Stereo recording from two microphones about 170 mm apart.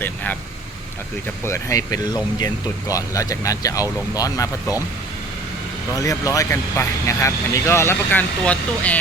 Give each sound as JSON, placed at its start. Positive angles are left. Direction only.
{"t": 1.5, "sound": "speech", "side_deg": 15}
{"t": 6.0, "sound": "speech", "side_deg": 20}